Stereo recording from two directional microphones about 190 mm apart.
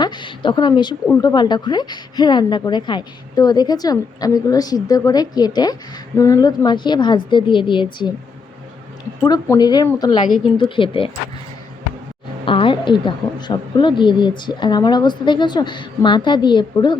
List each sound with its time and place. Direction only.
0.0 s a sound: 25° left (ahead or behind)
1.2 s a woman's voice: 20° left (ahead or behind)
9.2 s a woman's voice: 20° left (ahead or behind)
12.5 s a woman's voice: 25° left (ahead or behind)